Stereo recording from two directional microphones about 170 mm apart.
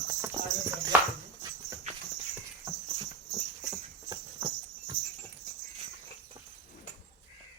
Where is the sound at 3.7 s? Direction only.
25° right (ahead or behind).